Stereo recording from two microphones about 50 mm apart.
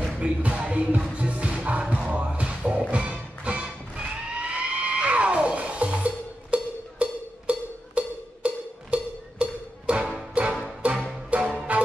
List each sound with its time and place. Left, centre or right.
0.2 s music: right